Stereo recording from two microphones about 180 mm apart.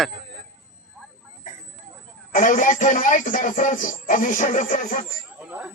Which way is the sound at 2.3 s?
45° left (ahead or behind).